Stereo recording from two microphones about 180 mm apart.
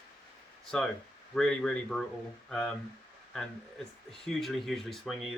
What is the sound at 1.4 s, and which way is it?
Speech, 5° left (ahead or behind).